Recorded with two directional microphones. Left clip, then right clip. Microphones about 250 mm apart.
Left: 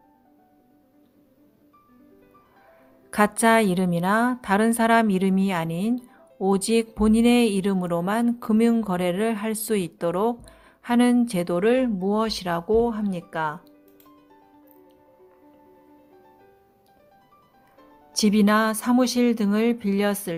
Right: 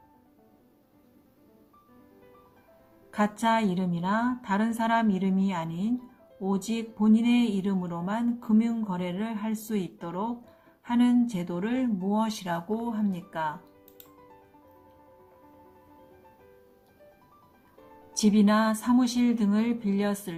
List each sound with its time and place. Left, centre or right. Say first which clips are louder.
3.1 s speech: left 7 dB; left
18.3 s speech: left 4 dB; left